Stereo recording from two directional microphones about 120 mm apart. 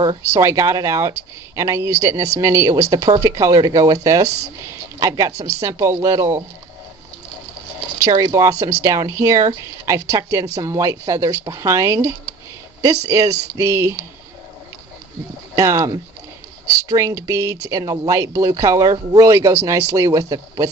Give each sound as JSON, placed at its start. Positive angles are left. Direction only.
{"t": 0.4, "sound": "speech", "side_deg": -25}
{"t": 8.0, "sound": "speech", "side_deg": -30}
{"t": 15.5, "sound": "speech", "side_deg": -25}